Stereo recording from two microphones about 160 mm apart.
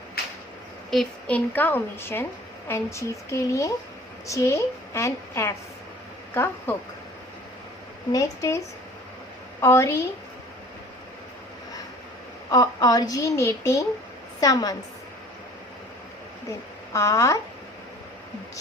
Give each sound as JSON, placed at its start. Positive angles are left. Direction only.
{"t": 0.9, "sound": "a woman's voice", "side_deg": 5}
{"t": 8.1, "sound": "a woman's voice", "side_deg": 20}
{"t": 12.5, "sound": "a woman's voice", "side_deg": 20}
{"t": 16.9, "sound": "a woman's voice", "side_deg": 20}